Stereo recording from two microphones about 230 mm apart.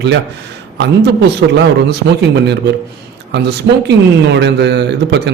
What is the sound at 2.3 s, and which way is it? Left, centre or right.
Speech, right.